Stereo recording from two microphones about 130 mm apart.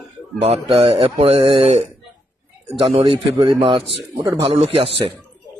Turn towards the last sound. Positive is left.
turn(degrees=-45)  # may be behind; listen again after turning